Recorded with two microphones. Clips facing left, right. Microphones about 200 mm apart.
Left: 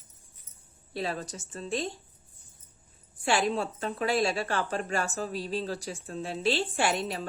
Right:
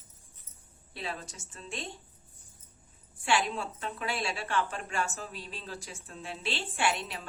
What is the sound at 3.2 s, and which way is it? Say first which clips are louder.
A woman's voice: left 3 dB; 40° left (ahead or behind).